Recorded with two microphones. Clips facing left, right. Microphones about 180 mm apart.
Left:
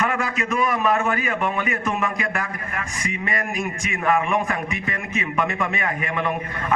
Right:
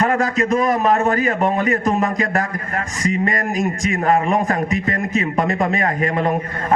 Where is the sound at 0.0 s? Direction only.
40° right (ahead or behind).